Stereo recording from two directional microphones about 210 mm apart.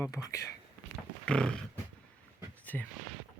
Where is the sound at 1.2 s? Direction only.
5° left (ahead or behind).